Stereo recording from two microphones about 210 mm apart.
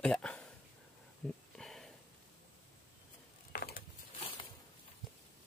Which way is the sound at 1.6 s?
Centre (ahead or behind).